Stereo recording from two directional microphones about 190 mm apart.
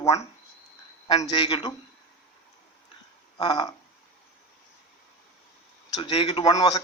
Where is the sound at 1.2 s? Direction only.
25° left (ahead or behind).